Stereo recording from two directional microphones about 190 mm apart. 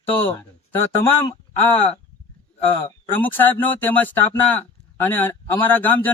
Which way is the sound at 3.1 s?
10° left (ahead or behind).